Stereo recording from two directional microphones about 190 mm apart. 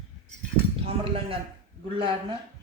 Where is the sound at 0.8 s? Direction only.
30° right (ahead or behind).